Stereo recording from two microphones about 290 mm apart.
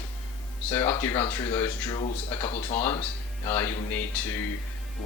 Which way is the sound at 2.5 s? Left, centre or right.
Left.